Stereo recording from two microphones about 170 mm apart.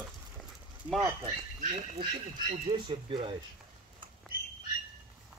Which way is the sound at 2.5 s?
30° right (ahead or behind).